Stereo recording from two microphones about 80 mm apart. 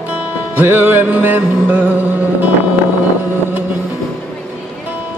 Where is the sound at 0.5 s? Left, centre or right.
Right.